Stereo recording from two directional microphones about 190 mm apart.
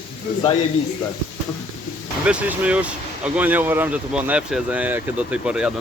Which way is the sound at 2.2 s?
5° right (ahead or behind).